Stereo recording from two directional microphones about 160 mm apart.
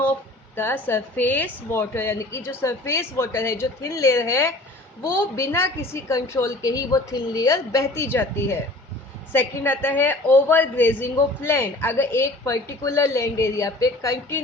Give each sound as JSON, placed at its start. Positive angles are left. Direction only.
{"t": 0.5, "sound": "a woman's voice", "side_deg": 10}